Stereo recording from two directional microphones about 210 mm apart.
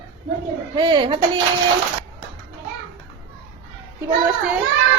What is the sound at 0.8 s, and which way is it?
Speech, 20° right (ahead or behind).